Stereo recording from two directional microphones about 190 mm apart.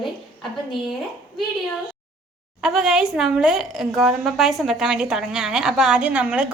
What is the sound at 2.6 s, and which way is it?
A woman's voice, 5° right (ahead or behind).